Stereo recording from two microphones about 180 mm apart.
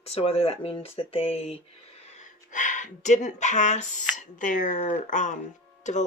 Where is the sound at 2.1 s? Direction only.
45° left (ahead or behind).